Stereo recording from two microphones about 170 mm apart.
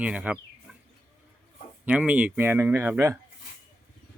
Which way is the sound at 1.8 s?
5° right (ahead or behind).